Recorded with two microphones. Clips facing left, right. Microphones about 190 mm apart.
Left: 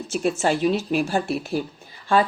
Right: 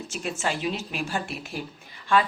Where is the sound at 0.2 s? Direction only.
45° left (ahead or behind).